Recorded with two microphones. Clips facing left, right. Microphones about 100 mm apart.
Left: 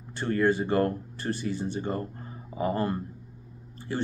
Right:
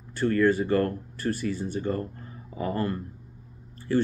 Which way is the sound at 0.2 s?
20° left (ahead or behind).